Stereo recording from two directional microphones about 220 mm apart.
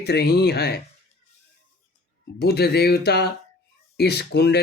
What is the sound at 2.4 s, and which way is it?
Speech, 45° left (ahead or behind).